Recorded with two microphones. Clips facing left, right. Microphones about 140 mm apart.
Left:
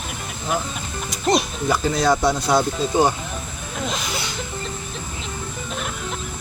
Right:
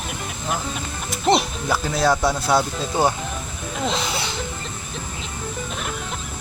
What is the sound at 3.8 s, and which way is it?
Speech, 30° right (ahead or behind).